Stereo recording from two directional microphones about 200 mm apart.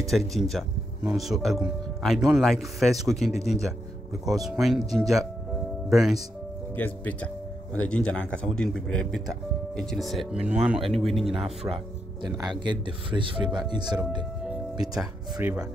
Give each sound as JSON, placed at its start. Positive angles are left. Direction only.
{"t": 0.1, "sound": "speech", "side_deg": 0}
{"t": 12.4, "sound": "speech", "side_deg": -20}
{"t": 14.5, "sound": "music", "side_deg": 0}
{"t": 15.4, "sound": "speech", "side_deg": -5}